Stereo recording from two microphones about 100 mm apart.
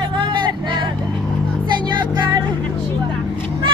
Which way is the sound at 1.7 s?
50° right (ahead or behind).